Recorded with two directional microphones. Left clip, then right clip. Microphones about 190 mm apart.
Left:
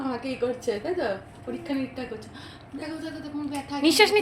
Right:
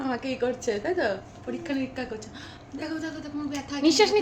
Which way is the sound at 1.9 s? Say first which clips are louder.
Right 1 dB; 15° right (ahead or behind).